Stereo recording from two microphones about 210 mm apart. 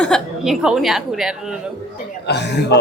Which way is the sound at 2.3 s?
55° left (ahead or behind).